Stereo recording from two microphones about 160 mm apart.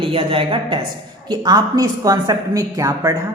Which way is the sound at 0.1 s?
35° right (ahead or behind).